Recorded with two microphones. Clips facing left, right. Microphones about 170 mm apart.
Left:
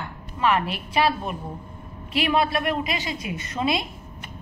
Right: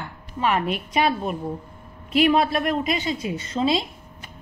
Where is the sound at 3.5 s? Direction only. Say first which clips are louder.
Right 3 dB; 30° right (ahead or behind).